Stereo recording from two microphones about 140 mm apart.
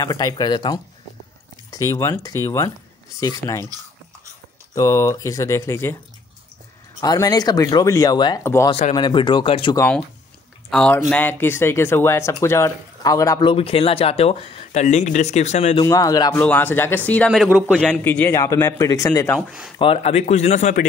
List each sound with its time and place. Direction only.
0.0 s a man's voice: 30° left (ahead or behind)
1.7 s a man's voice: 25° left (ahead or behind)
4.7 s a man's voice: 25° left (ahead or behind)
7.0 s a man's voice: 25° left (ahead or behind)
8.6 s speech: 50° left (ahead or behind)
8.9 s speech: 35° left (ahead or behind)
10.7 s speech: 5° left (ahead or behind); by 13.5 s 25° left (ahead or behind)
13.5 s speech: 40° left (ahead or behind)
15.8 s a man's voice: 25° left (ahead or behind)
16.3 s speech: 10° left (ahead or behind)
17.5 s a man's voice: 5° right (ahead or behind)
17.8 s a man's voice: 10° left (ahead or behind); by 19.3 s 25° left (ahead or behind)
19.8 s speech: 45° left (ahead or behind)